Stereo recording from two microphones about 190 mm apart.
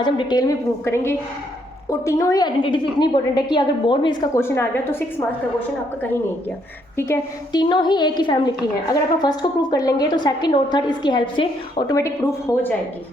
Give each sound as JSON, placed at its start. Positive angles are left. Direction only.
{"t": 0.0, "sound": "a woman's voice", "side_deg": 20}
{"t": 4.4, "sound": "a woman's voice", "side_deg": 10}
{"t": 6.9, "sound": "a woman's voice", "side_deg": 15}
{"t": 7.6, "sound": "a woman's voice", "side_deg": 25}